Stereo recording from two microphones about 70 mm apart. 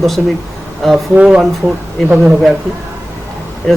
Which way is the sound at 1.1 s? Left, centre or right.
Centre.